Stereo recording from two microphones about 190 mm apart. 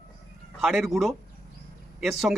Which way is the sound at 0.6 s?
Centre (ahead or behind).